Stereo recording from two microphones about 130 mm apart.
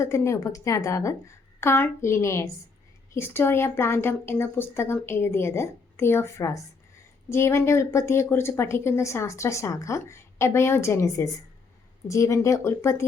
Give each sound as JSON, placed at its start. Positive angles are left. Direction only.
{"t": 0.0, "sound": "speech", "side_deg": 25}